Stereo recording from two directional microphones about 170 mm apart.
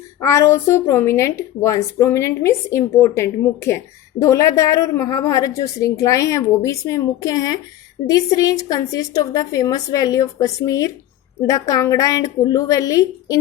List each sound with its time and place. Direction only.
0.2 s a woman's voice: 15° left (ahead or behind)